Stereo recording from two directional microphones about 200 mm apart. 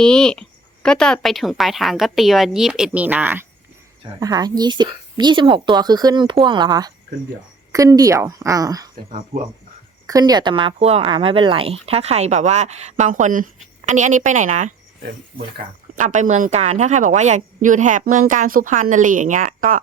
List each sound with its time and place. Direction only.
0.0 s a woman's voice: 5° left (ahead or behind); by 8.9 s 20° right (ahead or behind)
10.1 s speech: 20° right (ahead or behind); by 14.7 s 40° right (ahead or behind)
16.0 s speech: 40° right (ahead or behind)